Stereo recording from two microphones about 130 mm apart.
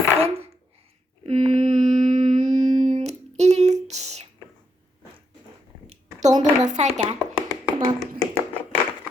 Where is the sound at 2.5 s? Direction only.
30° right (ahead or behind).